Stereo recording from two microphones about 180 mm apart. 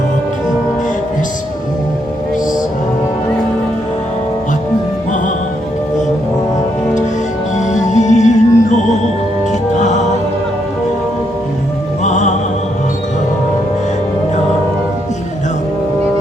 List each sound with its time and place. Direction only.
7.5 s music: 40° left (ahead or behind)
12.0 s music: 40° left (ahead or behind)